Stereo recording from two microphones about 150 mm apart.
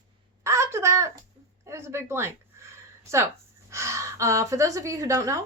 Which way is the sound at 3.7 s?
20° right (ahead or behind).